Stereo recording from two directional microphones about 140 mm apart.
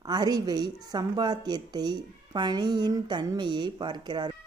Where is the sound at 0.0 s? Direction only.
30° right (ahead or behind).